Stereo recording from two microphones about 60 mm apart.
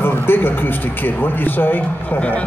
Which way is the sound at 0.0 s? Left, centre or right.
Left.